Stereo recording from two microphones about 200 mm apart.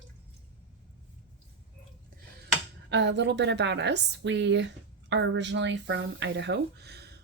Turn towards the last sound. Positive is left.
turn(degrees=-55)  # may be behind; listen again after turning